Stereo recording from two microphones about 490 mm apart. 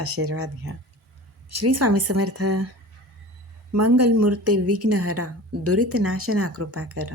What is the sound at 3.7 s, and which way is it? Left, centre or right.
A woman's voice, right.